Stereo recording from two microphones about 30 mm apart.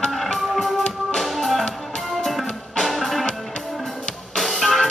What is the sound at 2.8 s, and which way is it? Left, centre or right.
Music, centre.